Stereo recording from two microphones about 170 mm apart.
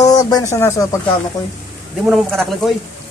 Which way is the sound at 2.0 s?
Centre (ahead or behind).